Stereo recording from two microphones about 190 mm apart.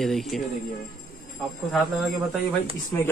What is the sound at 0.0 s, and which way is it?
Speech, centre (ahead or behind).